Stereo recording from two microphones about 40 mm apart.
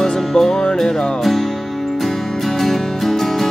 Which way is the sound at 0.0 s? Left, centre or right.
Centre.